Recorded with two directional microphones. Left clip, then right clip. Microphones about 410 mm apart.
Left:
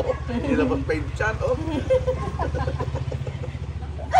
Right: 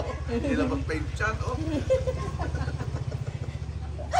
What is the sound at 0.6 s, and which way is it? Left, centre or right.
Speech, centre.